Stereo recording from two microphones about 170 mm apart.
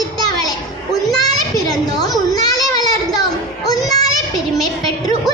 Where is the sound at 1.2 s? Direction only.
20° left (ahead or behind).